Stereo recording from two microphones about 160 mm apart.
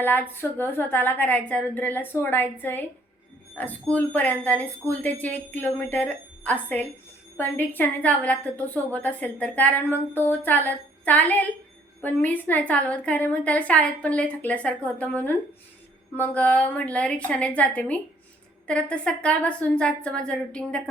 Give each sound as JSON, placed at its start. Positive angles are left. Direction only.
{"t": 0.0, "sound": "a woman's voice", "side_deg": 10}